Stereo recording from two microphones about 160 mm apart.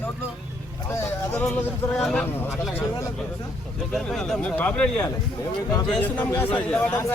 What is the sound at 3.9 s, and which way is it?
A man's voice, 5° left (ahead or behind).